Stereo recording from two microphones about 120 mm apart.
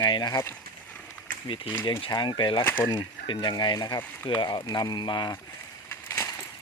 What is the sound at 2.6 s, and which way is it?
Speech, 20° left (ahead or behind).